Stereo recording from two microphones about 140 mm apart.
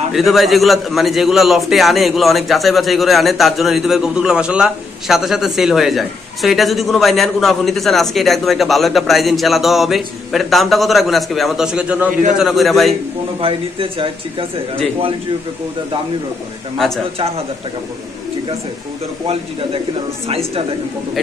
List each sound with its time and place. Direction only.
0.1 s a man's voice: centre (ahead or behind)
13.4 s speech: 40° right (ahead or behind)
16.7 s a man's voice: centre (ahead or behind)
20.2 s a woman's voice: 45° right (ahead or behind)